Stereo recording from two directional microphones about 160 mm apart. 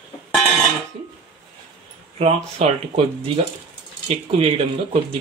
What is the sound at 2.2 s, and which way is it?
Speech, 40° right (ahead or behind).